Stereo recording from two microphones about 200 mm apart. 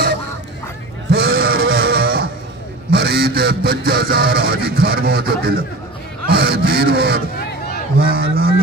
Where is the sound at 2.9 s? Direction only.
55° right (ahead or behind).